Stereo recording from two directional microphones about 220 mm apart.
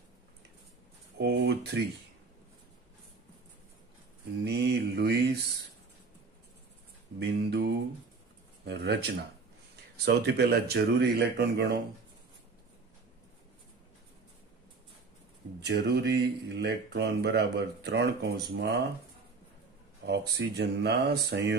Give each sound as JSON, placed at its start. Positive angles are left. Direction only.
{"t": 1.1, "sound": "a sound", "side_deg": -50}
{"t": 4.5, "sound": "mantra", "side_deg": -50}
{"t": 7.2, "sound": "speech", "side_deg": -50}
{"t": 15.6, "sound": "speech", "side_deg": -50}
{"t": 20.1, "sound": "speech", "side_deg": -50}